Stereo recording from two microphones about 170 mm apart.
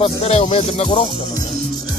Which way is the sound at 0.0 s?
35° left (ahead or behind).